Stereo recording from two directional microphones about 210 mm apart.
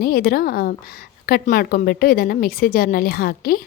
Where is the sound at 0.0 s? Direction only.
45° left (ahead or behind).